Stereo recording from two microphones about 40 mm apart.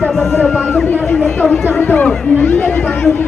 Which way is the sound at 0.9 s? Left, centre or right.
Left.